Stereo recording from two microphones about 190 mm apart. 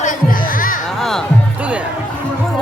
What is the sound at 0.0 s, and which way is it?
Music, 45° left (ahead or behind).